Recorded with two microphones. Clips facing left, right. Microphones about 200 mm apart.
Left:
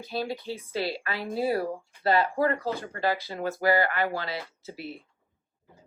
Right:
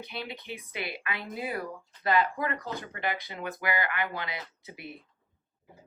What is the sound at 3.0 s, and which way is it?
Speech, 20° right (ahead or behind).